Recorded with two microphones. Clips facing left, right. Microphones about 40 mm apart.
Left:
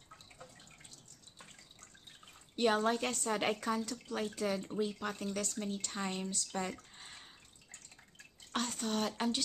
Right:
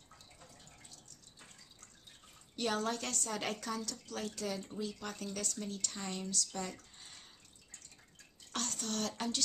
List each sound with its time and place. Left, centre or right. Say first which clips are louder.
2.5 s speech: left 5 dB; left
8.5 s speech: left 3 dB; centre